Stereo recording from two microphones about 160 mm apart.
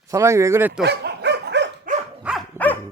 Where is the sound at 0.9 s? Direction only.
90° right.